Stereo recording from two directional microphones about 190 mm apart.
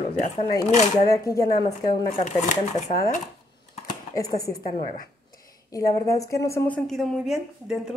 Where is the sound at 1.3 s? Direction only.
20° left (ahead or behind).